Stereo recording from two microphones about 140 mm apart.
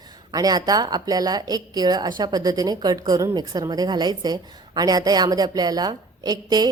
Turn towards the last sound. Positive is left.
turn(degrees=-30)  # may be behind; listen again after turning